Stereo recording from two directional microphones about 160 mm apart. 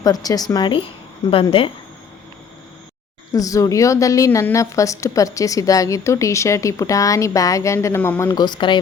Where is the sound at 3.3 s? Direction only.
20° left (ahead or behind).